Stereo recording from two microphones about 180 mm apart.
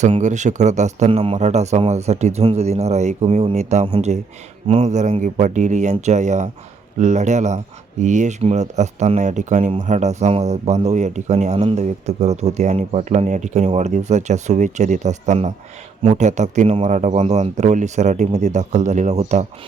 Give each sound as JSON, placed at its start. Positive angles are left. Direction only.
{"t": 0.0, "sound": "speech", "side_deg": -40}